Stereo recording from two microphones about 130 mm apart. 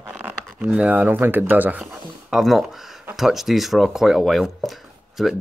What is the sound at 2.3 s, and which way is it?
Speech, centre (ahead or behind).